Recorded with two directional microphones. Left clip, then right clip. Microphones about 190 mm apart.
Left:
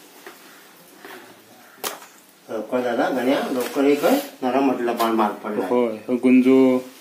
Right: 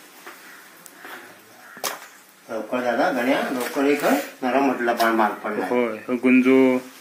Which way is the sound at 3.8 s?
25° left (ahead or behind).